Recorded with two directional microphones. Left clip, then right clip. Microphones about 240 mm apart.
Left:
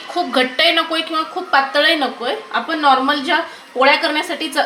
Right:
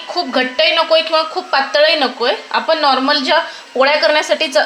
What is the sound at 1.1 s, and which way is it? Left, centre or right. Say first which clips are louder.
A woman's voice: right 2 dB; right.